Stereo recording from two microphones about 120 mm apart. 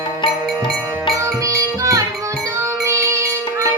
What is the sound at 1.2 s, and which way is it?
Music, 25° right (ahead or behind).